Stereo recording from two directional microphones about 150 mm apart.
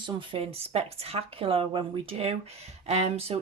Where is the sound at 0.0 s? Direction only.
35° right (ahead or behind).